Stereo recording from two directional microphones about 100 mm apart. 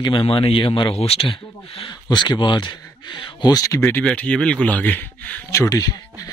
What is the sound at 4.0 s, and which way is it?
Speech, 10° left (ahead or behind).